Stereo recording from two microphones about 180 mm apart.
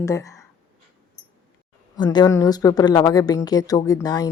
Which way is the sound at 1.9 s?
25° left (ahead or behind).